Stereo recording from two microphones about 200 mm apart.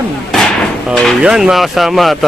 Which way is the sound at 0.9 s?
Centre (ahead or behind).